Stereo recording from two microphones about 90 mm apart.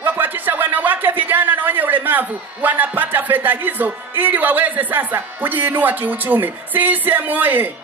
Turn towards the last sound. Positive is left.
turn(degrees=-20)  # may be behind; listen again after turning